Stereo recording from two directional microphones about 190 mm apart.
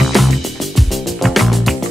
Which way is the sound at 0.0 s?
Centre (ahead or behind).